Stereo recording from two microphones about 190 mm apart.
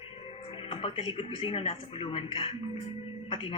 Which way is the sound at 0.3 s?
30° left (ahead or behind).